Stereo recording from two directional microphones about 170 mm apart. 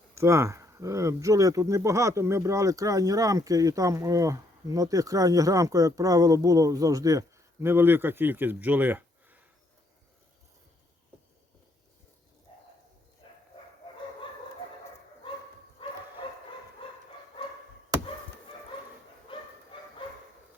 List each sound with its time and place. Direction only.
0.1 s speech: 15° right (ahead or behind)
19.3 s bow-wow: 30° left (ahead or behind)